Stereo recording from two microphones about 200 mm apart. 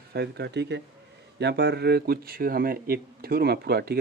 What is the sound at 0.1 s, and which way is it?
A man's voice, 55° right (ahead or behind).